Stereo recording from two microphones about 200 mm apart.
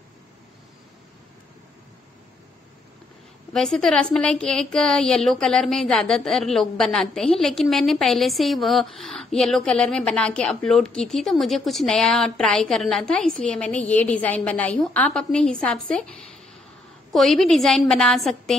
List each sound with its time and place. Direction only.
3.5 s a woman's voice: centre (ahead or behind)
17.1 s a woman's voice: centre (ahead or behind)